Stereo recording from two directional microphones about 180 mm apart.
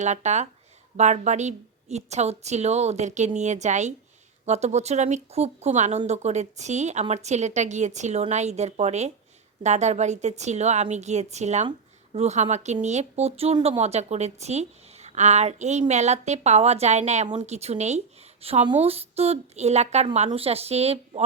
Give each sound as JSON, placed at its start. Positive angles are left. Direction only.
{"t": 0.0, "sound": "a woman's voice", "side_deg": -40}